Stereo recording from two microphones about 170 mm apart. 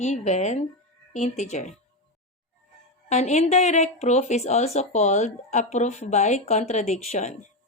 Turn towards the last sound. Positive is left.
turn(degrees=40)  # may be behind; listen again after turning